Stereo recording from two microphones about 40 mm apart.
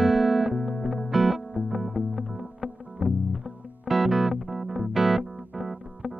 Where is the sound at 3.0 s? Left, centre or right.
Right.